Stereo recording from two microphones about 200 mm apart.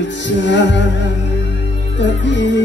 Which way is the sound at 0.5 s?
65° left (ahead or behind).